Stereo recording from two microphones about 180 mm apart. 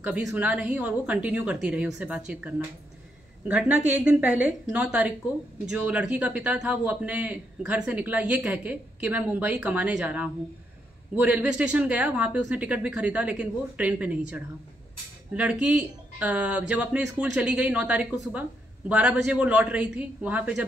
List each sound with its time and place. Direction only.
0.0 s speech: 5° right (ahead or behind)